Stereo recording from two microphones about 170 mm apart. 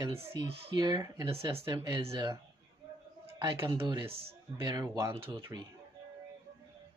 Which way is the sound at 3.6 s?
30° right (ahead or behind).